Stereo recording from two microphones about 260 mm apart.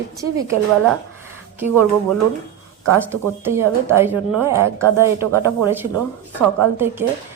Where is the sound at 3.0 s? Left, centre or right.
Centre.